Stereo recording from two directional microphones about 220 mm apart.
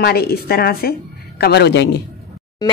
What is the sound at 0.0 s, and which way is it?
A woman's voice, 45° left (ahead or behind).